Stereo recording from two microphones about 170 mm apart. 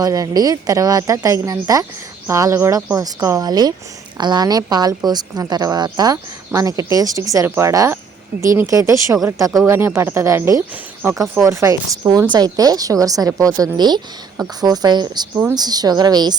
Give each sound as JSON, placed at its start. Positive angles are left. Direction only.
{"t": 0.0, "sound": "a woman's voice", "side_deg": -20}